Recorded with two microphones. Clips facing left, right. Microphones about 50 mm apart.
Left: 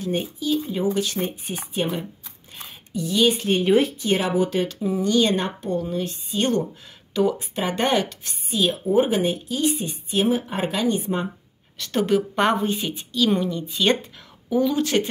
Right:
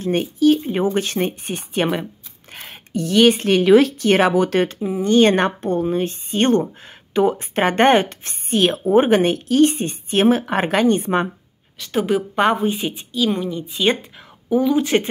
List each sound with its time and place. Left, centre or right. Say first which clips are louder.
0.1 s a woman's voice: right 9 dB; right
2.5 s a sound: right 5 dB; right
3.4 s speech: right 6 dB; right
5.0 s speech: right 7 dB; right
5.3 s speech: right 5 dB; right
8.5 s a woman's voice: right 5 dB; right
11.8 s a woman's voice: right 1 dB; centre